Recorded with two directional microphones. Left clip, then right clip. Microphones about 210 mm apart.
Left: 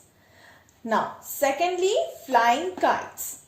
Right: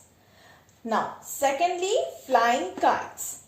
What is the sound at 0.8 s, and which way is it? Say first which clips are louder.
A child's voice: left 2 dB; 35° left (ahead or behind).